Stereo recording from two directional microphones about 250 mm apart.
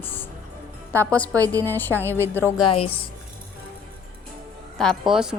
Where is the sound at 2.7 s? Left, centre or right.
Left.